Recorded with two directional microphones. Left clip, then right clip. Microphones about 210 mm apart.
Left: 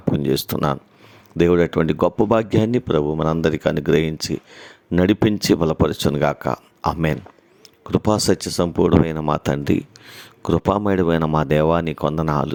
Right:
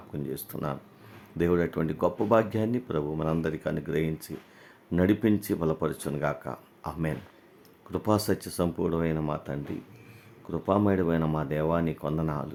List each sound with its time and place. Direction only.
0.1 s speech: 40° left (ahead or behind)